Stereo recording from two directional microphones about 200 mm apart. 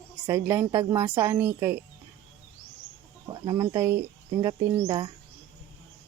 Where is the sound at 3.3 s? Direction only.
20° right (ahead or behind).